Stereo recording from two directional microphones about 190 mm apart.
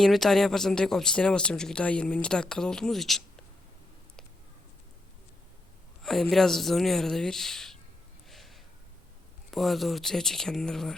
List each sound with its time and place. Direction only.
0.0 s speech: centre (ahead or behind)
6.0 s speech: centre (ahead or behind)
8.3 s a sound: centre (ahead or behind)
9.5 s speech: centre (ahead or behind)